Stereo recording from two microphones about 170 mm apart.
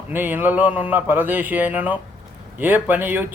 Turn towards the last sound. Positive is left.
turn(degrees=-10)  # may be behind; listen again after turning